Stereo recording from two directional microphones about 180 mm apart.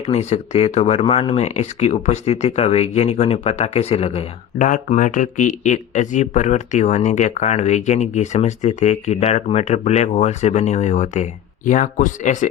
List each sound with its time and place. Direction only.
0.0 s speech: 35° left (ahead or behind)